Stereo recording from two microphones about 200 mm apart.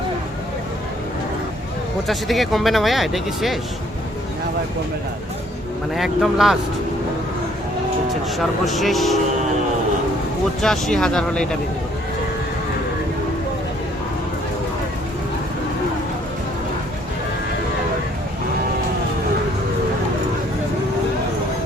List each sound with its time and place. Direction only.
2.0 s speech: centre (ahead or behind)
5.9 s speech: centre (ahead or behind)
8.6 s speech: centre (ahead or behind)
10.6 s speech: centre (ahead or behind)